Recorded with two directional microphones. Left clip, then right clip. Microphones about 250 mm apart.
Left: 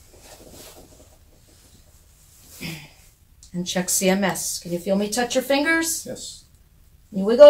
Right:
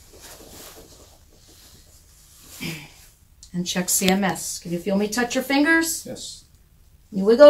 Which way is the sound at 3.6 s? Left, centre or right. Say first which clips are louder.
Left 1 dB; centre.